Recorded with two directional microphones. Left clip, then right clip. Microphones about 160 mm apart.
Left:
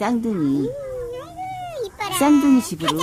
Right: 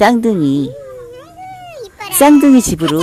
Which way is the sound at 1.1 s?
Centre (ahead or behind).